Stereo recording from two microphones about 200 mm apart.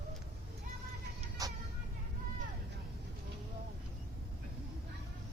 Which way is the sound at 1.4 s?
20° right (ahead or behind).